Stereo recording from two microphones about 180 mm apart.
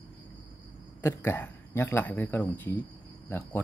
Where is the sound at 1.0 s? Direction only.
10° left (ahead or behind).